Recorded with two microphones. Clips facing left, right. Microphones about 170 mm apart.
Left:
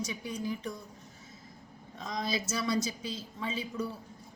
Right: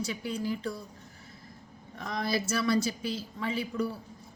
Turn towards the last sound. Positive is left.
turn(degrees=20)  # may be behind; listen again after turning